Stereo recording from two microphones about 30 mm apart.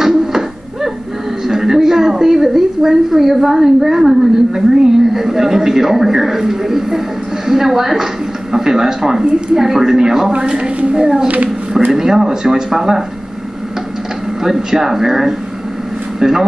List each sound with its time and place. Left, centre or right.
1.5 s a woman's voice: centre
10.3 s a woman's voice: right
11.9 s speech: centre
14.4 s speech: centre